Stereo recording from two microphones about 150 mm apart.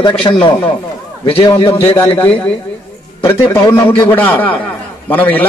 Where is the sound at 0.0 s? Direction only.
30° left (ahead or behind).